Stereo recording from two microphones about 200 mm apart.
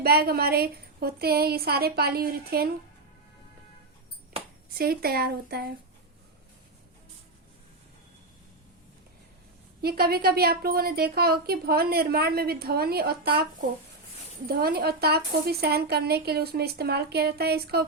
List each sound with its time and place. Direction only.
0.0 s a woman's voice: 50° right (ahead or behind)
4.7 s a woman's voice: 50° right (ahead or behind)
9.8 s a woman's voice: 50° right (ahead or behind)